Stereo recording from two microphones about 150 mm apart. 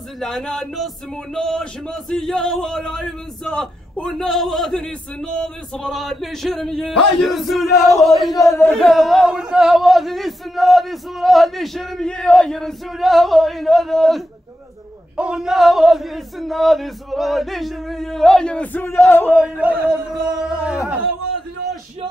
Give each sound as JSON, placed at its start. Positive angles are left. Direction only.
{"t": 0.2, "sound": "speech", "side_deg": 5}
{"t": 8.4, "sound": "speech", "side_deg": 20}
{"t": 8.7, "sound": "speech", "side_deg": 0}
{"t": 19.4, "sound": "speech", "side_deg": -10}